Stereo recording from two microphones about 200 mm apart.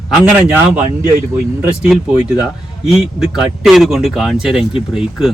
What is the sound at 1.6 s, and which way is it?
A man's voice, 5° right (ahead or behind).